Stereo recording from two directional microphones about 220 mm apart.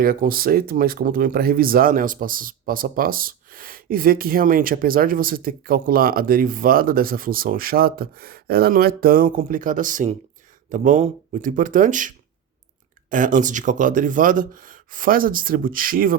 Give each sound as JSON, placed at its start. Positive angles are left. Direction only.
{"t": 0.0, "sound": "speech", "side_deg": -40}